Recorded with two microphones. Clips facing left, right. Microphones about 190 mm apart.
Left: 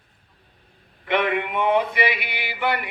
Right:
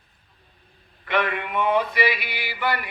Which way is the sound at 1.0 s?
20° left (ahead or behind).